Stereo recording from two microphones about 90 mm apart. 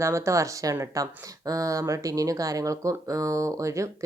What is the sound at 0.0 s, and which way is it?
Speech, 35° right (ahead or behind).